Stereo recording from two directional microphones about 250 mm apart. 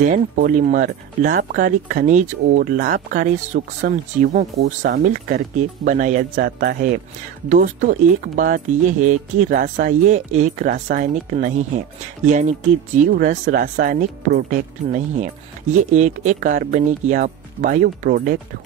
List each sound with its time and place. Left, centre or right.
0.0 s speech: right